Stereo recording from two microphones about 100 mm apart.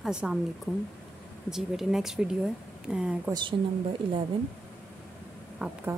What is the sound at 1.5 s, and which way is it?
Speech, 5° right (ahead or behind).